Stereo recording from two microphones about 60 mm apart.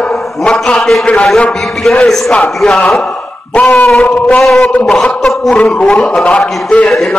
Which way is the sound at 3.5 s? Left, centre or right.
Left.